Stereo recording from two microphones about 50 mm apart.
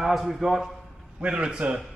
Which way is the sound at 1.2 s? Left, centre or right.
Centre.